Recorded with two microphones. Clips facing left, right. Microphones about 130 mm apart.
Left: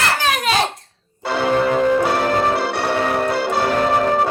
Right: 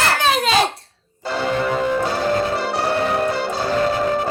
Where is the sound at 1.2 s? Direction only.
65° left (ahead or behind).